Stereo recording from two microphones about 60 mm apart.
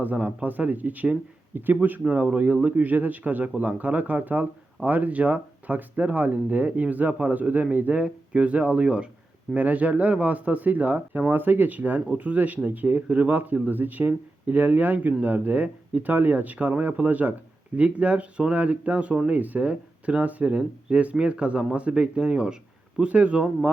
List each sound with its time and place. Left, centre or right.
0.0 s speech: right